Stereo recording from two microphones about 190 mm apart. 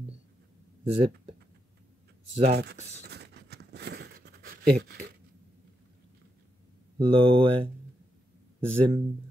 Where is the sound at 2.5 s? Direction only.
60° right (ahead or behind).